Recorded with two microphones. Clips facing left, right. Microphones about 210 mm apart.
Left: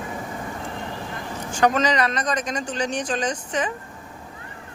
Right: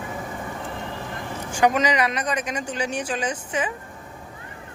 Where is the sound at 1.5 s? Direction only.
10° right (ahead or behind).